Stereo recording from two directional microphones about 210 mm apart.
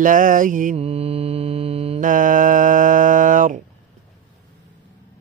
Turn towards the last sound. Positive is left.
turn(degrees=-40)  # may be behind; listen again after turning